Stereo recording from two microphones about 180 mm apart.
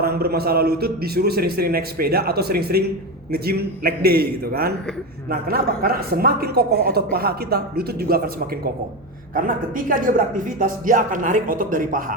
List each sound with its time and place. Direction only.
0.0 s a man's voice: 60° right (ahead or behind)